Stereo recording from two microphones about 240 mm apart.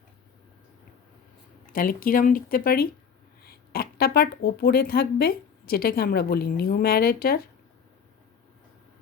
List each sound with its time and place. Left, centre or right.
1.7 s speech: left